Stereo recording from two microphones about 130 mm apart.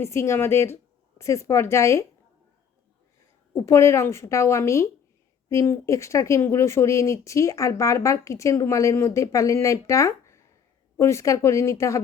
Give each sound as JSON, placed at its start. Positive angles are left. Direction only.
{"t": 0.0, "sound": "speech", "side_deg": 20}
{"t": 3.5, "sound": "speech", "side_deg": 20}